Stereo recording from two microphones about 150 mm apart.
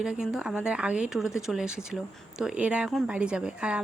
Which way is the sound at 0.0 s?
5° right (ahead or behind).